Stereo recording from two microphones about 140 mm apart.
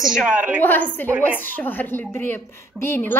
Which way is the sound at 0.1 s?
5° right (ahead or behind).